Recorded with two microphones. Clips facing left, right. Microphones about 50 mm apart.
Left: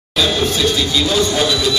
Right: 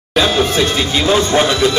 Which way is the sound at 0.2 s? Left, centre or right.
Right.